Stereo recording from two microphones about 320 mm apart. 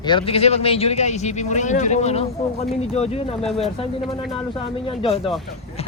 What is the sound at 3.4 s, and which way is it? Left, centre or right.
Speech, centre.